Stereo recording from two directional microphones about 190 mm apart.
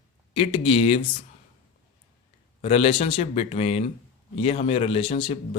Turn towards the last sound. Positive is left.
turn(degrees=30)  # may be behind; listen again after turning